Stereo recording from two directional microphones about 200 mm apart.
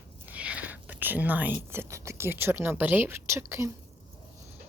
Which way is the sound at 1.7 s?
15° right (ahead or behind).